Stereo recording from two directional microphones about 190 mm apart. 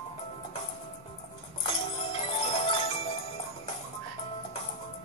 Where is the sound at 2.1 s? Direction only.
30° left (ahead or behind).